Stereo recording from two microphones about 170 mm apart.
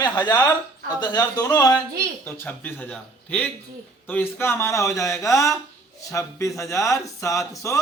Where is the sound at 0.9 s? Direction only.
25° left (ahead or behind).